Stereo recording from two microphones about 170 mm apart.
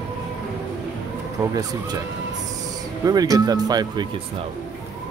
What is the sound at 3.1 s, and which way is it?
Speech, 20° right (ahead or behind).